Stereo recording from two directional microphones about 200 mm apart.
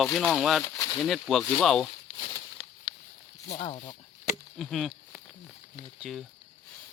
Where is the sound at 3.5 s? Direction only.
35° left (ahead or behind).